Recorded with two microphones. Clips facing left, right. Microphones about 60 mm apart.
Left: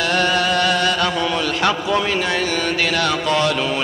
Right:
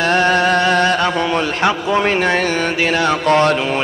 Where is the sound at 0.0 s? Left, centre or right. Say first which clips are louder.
Right 4 dB; right.